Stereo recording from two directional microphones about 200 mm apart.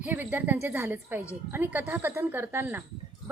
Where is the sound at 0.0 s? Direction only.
10° right (ahead or behind).